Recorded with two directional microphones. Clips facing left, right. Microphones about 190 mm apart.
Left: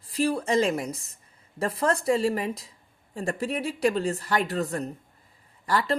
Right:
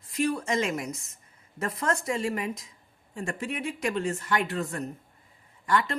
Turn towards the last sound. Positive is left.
turn(degrees=35)  # may be behind; listen again after turning